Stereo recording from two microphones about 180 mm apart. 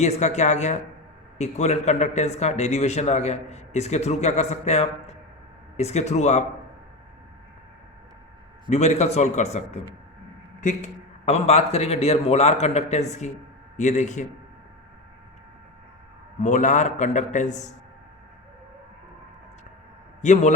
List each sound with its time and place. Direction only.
0.0 s a man's voice: 40° left (ahead or behind)
8.7 s a man's voice: 40° left (ahead or behind)
16.4 s a man's voice: 40° left (ahead or behind)
20.2 s a man's voice: 40° left (ahead or behind)